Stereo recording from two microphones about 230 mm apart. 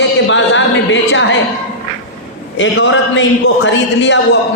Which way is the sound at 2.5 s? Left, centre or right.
Left.